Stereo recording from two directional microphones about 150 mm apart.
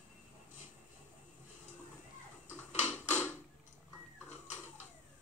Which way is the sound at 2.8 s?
15° right (ahead or behind).